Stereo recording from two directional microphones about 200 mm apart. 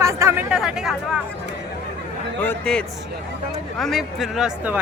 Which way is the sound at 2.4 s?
5° left (ahead or behind).